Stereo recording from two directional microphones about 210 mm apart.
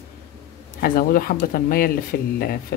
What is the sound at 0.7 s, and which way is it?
Speech, 45° left (ahead or behind).